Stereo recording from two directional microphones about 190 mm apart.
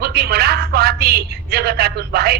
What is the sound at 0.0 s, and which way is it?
A woman's voice, 55° right (ahead or behind).